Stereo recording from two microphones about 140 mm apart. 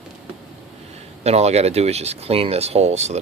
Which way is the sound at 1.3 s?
50° right (ahead or behind).